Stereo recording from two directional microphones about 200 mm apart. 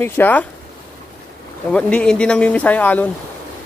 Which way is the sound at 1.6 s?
5° left (ahead or behind).